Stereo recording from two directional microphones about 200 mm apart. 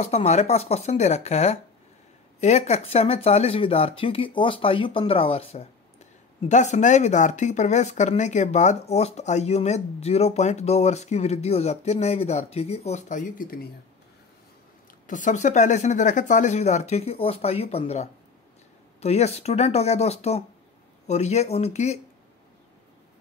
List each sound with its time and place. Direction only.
0.0 s speech: 30° left (ahead or behind)
15.0 s speech: 40° left (ahead or behind)